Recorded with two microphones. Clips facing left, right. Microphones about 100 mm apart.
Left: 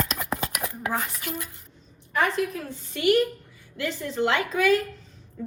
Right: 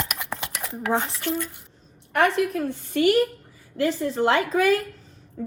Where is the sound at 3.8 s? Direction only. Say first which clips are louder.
Right 4 dB; 40° right (ahead or behind).